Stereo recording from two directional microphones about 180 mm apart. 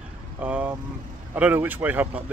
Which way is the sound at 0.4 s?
10° right (ahead or behind).